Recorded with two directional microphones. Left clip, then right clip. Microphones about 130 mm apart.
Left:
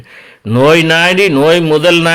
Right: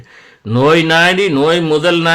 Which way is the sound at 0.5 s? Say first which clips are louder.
Left 2 dB; 20° left (ahead or behind).